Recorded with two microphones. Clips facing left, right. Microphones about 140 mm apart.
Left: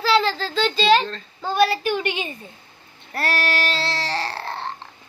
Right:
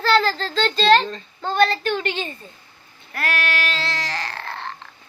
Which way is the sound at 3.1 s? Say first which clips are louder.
Left 1 dB; 35° left (ahead or behind).